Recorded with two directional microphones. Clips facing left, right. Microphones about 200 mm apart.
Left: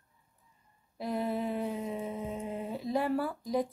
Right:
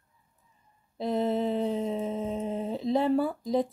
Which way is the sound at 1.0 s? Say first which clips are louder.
Right 5 dB; 25° right (ahead or behind).